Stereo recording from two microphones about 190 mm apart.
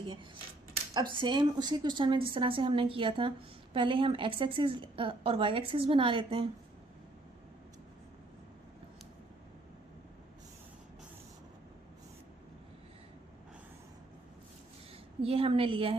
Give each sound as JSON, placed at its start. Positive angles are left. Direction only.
{"t": 1.1, "sound": "a woman's voice", "side_deg": -25}
{"t": 15.2, "sound": "a woman's voice", "side_deg": -30}